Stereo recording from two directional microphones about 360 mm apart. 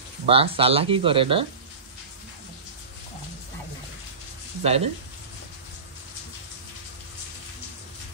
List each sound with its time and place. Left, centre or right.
0.3 s speech: centre
4.6 s speech: centre